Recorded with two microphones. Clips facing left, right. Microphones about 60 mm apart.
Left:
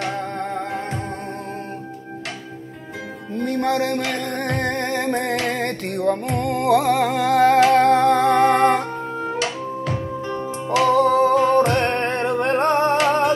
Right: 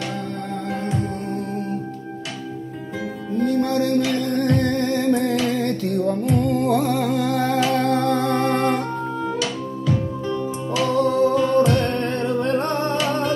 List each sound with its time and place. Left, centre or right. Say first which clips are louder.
3.3 s music: right 1 dB; left
9.2 s music: even; left